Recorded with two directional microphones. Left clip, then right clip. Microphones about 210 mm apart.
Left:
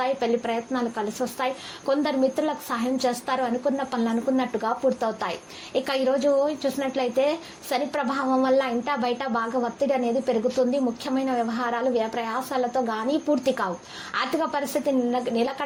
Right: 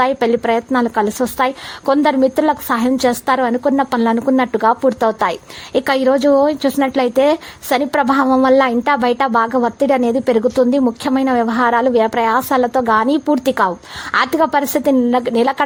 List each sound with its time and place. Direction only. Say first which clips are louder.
0.0 s a woman's voice: right 10 dB; 40° right (ahead or behind)